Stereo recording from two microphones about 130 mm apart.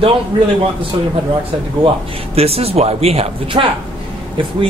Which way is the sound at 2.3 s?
50° right (ahead or behind).